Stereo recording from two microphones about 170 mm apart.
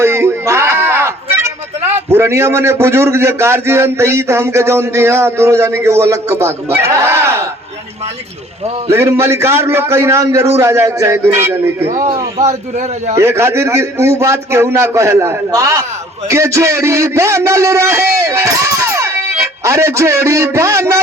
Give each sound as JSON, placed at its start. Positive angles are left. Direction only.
{"t": 0.0, "sound": "a sound", "side_deg": -15}
{"t": 2.0, "sound": "a man's voice", "side_deg": -15}
{"t": 8.9, "sound": "a man's voice", "side_deg": -15}
{"t": 12.4, "sound": "a man's voice", "side_deg": -45}
{"t": 13.1, "sound": "a man's voice", "side_deg": -15}